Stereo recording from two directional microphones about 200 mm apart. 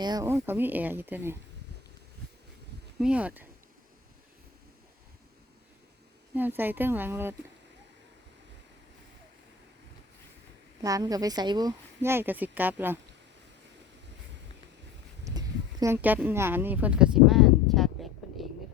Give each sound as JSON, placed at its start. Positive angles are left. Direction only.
{"t": 0.0, "sound": "speech", "side_deg": -20}
{"t": 3.0, "sound": "speech", "side_deg": -5}
{"t": 6.3, "sound": "speech", "side_deg": -10}
{"t": 10.8, "sound": "speech", "side_deg": -15}
{"t": 15.2, "sound": "a sound", "side_deg": -15}